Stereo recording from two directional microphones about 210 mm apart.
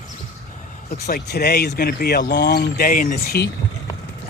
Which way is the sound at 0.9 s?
45° left (ahead or behind).